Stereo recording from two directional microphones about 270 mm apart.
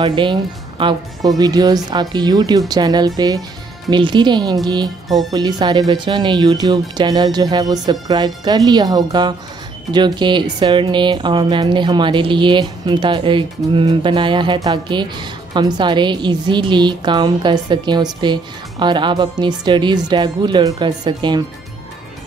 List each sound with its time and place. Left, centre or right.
0.0 s speech: centre
5.0 s speech: centre
5.3 s speech: centre